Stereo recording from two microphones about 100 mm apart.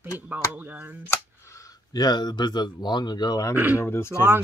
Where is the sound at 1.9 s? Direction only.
45° left (ahead or behind).